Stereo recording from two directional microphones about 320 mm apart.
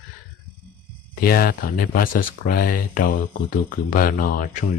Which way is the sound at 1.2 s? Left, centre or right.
Left.